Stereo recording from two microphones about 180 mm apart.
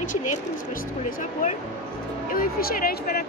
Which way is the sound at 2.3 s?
55° left (ahead or behind).